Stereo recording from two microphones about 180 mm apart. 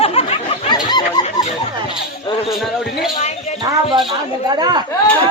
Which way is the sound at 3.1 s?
40° left (ahead or behind).